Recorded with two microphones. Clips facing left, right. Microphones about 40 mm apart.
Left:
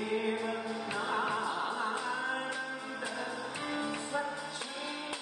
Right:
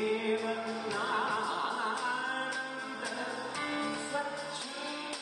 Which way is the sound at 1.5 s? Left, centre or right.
Right.